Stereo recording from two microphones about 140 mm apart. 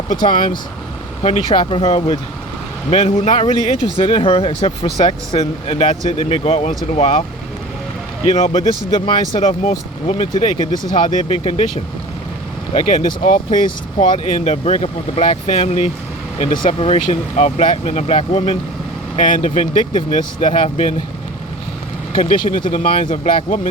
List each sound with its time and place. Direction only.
0.3 s speech: 70° left (ahead or behind)
1.5 s speech: 35° left (ahead or behind)
1.8 s speech: 45° left (ahead or behind)
8.9 s speech: 40° left (ahead or behind)
9.1 s speech: 55° left (ahead or behind)
12.7 s speech: 60° left (ahead or behind)
14.0 s speech: 55° left (ahead or behind)
19.1 s speech: 70° left (ahead or behind)
22.2 s speech: 65° left (ahead or behind)